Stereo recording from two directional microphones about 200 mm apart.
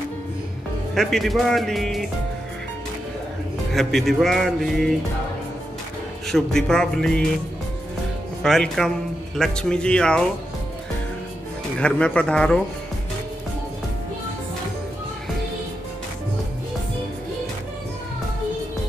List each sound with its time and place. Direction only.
0.9 s speech: centre (ahead or behind)
3.7 s speech: centre (ahead or behind)
6.2 s speech: centre (ahead or behind)
8.4 s speech: centre (ahead or behind)
11.8 s speech: 5° left (ahead or behind)